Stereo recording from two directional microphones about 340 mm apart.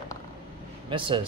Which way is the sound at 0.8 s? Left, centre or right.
Centre.